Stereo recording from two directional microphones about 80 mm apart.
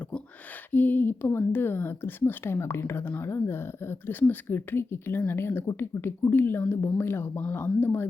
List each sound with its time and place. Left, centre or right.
0.7 s speech: left